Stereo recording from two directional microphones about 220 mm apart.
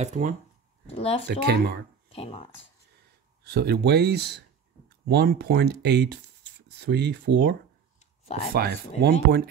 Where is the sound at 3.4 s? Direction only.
45° right (ahead or behind).